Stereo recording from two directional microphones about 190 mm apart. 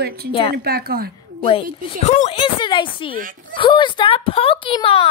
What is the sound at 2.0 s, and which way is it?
A woman's voice, 35° left (ahead or behind).